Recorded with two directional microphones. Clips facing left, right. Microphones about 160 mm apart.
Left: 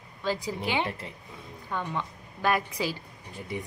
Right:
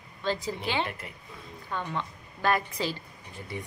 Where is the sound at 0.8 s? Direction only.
30° left (ahead or behind).